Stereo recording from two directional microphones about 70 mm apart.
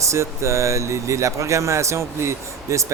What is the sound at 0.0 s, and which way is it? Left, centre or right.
Speech, right.